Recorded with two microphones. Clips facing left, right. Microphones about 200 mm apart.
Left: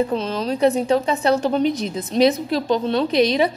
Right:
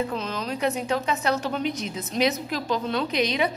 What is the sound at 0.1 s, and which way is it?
A woman's voice, 30° left (ahead or behind).